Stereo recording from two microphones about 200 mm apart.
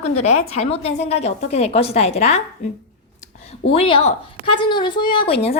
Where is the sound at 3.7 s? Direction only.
25° left (ahead or behind).